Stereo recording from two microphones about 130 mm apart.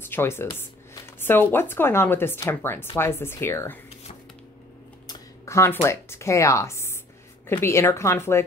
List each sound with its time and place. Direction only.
0.0 s speech: 20° left (ahead or behind)
5.0 s speech: 25° left (ahead or behind)